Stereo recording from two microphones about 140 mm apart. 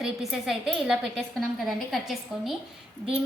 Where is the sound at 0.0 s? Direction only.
Centre (ahead or behind).